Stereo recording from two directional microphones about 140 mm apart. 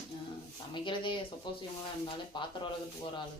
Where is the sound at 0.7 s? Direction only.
35° left (ahead or behind).